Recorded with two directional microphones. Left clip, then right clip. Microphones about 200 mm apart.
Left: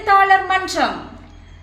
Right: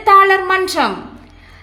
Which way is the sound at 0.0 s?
45° right (ahead or behind).